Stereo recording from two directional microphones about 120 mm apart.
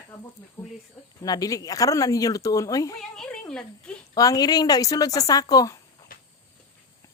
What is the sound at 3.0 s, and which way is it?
Speech, 5° left (ahead or behind).